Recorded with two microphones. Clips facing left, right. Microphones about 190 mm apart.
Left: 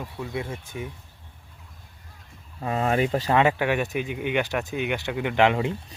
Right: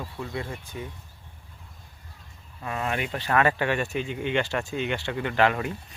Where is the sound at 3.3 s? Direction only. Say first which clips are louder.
Even; 15° left (ahead or behind).